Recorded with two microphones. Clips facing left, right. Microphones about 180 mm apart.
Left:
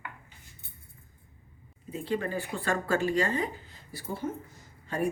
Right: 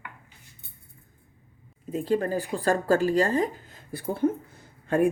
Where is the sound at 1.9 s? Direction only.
40° right (ahead or behind).